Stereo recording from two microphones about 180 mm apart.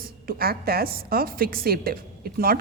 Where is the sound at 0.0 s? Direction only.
55° right (ahead or behind).